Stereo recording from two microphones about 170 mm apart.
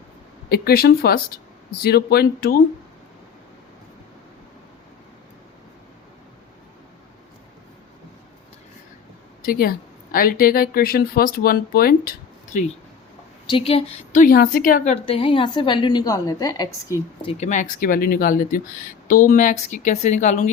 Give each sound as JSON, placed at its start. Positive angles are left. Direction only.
{"t": 0.5, "sound": "a woman's voice", "side_deg": 65}
{"t": 9.4, "sound": "a woman's voice", "side_deg": 60}
{"t": 13.5, "sound": "speech", "side_deg": 35}
{"t": 15.0, "sound": "a woman's voice", "side_deg": 30}
{"t": 16.9, "sound": "speech", "side_deg": -15}
{"t": 17.2, "sound": "speech", "side_deg": 40}